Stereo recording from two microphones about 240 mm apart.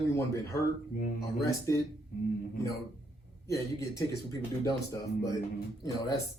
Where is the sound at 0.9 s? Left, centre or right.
Left.